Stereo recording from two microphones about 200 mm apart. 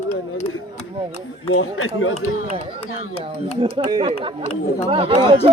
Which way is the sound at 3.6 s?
25° right (ahead or behind).